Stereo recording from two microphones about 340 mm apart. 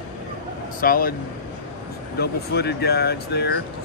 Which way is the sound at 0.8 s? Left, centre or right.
Left.